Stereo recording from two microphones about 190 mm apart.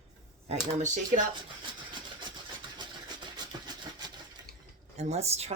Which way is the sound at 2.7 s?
25° right (ahead or behind).